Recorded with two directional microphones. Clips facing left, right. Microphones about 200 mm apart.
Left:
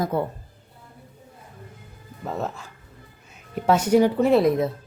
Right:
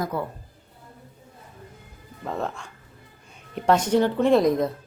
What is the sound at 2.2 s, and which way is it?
Speech, 5° left (ahead or behind).